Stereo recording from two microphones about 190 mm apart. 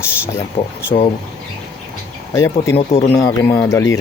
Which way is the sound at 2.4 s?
15° left (ahead or behind).